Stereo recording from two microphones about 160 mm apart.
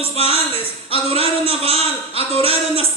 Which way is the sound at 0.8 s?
35° right (ahead or behind).